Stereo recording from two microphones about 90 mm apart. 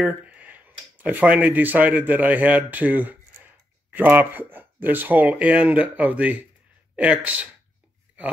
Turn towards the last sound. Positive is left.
turn(degrees=-15)  # may be behind; listen again after turning